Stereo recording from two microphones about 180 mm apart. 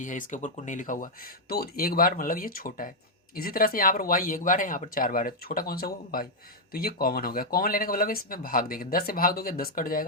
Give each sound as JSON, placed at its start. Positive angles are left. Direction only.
{"t": 0.0, "sound": "speech", "side_deg": 45}